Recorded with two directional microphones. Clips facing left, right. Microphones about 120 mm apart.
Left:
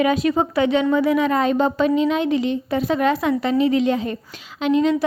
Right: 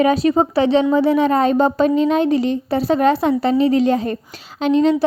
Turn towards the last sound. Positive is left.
turn(degrees=-30)  # may be behind; listen again after turning